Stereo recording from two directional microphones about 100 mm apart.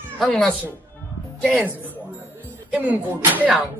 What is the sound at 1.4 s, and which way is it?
Speech, 15° right (ahead or behind).